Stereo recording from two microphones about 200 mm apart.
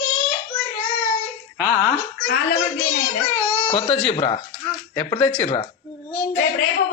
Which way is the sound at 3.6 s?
30° left (ahead or behind).